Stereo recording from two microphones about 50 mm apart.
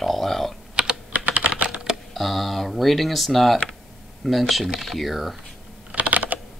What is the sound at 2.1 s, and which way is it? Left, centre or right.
Speech, centre.